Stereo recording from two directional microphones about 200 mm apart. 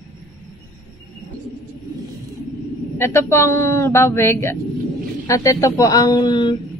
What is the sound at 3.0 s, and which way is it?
Speech, 15° left (ahead or behind).